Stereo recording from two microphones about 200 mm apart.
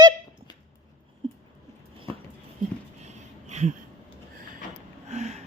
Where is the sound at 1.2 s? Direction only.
25° right (ahead or behind).